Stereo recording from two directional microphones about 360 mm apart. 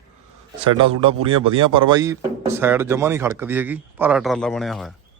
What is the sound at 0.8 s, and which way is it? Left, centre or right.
Speech, centre.